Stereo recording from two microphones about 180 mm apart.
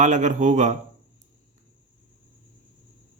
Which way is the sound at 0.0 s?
45° right (ahead or behind).